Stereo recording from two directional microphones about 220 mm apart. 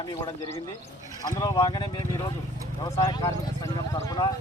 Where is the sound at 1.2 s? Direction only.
15° left (ahead or behind).